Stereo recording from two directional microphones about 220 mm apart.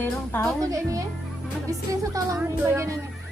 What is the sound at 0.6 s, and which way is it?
Speech, 15° right (ahead or behind).